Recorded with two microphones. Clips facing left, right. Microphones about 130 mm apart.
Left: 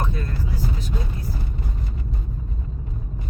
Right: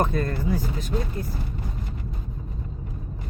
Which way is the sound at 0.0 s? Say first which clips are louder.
Right 5 dB; 50° right (ahead or behind).